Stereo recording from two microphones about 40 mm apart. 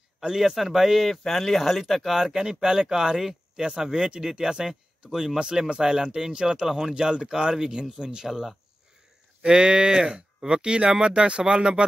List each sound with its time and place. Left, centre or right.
0.4 s speech: centre
2.1 s speech: centre
7.5 s speech: centre
9.4 s speech: right